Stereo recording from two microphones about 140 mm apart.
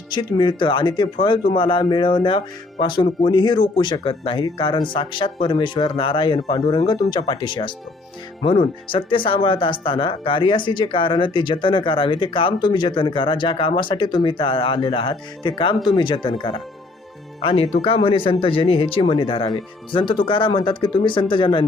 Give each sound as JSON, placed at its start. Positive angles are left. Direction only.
{"t": 0.1, "sound": "speech", "side_deg": 30}